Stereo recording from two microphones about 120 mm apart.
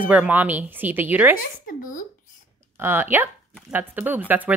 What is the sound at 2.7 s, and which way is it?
A woman's voice, 20° right (ahead or behind).